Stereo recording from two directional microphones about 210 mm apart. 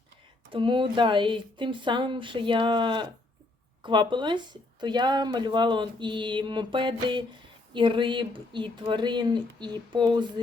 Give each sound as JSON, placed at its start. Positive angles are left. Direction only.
{"t": 0.5, "sound": "speech", "side_deg": -25}